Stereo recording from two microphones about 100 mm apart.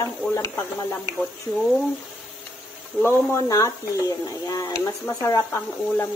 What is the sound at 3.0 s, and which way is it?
Speech, 35° left (ahead or behind).